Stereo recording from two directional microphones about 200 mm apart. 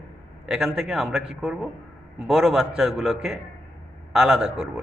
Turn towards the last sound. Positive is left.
turn(degrees=-5)  # may be behind; listen again after turning